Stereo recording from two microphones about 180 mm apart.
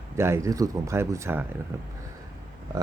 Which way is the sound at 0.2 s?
15° right (ahead or behind).